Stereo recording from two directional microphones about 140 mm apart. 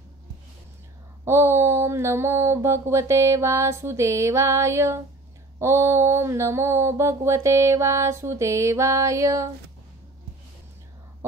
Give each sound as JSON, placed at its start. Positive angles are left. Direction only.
{"t": 1.2, "sound": "mantra", "side_deg": -20}